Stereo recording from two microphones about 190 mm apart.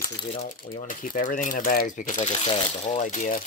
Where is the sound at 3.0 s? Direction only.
40° left (ahead or behind).